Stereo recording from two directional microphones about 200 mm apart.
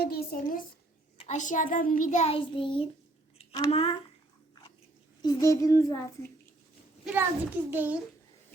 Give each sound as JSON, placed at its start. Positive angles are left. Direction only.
{"t": 0.0, "sound": "a woman's voice", "side_deg": 50}
{"t": 1.2, "sound": "a child's voice", "side_deg": 35}
{"t": 3.3, "sound": "a sound", "side_deg": 20}
{"t": 3.7, "sound": "a child's voice", "side_deg": 30}
{"t": 5.2, "sound": "a child's voice", "side_deg": 15}
{"t": 7.0, "sound": "a child's voice", "side_deg": -10}